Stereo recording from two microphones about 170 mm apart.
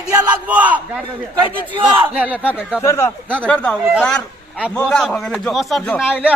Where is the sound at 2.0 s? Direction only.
10° right (ahead or behind).